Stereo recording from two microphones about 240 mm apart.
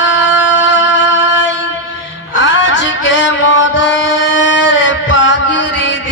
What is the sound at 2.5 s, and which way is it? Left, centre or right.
Music, left.